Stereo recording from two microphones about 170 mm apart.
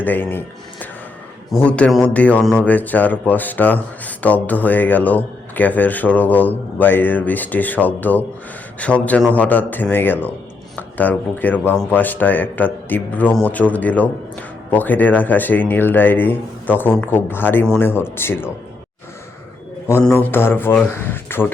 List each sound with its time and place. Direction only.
0.0 s a man's voice: 10° left (ahead or behind)
19.9 s a man's voice: 15° left (ahead or behind)